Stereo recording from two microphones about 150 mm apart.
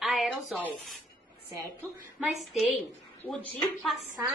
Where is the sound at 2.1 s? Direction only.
Centre (ahead or behind).